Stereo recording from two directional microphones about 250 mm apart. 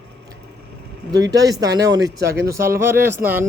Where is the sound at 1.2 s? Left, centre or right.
Centre.